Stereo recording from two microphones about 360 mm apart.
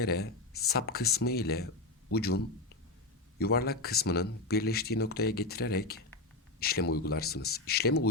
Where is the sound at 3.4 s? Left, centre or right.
Left.